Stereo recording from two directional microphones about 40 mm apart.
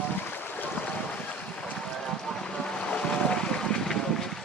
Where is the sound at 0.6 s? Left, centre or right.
Left.